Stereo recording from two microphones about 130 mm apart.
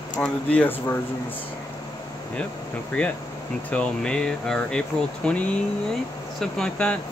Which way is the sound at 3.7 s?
10° left (ahead or behind).